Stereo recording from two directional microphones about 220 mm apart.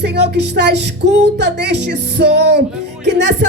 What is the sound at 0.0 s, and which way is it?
Music, 50° right (ahead or behind).